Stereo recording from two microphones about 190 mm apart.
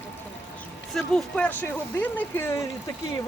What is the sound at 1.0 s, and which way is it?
Speech, 5° left (ahead or behind).